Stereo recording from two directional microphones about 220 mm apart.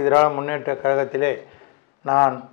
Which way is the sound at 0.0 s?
15° left (ahead or behind).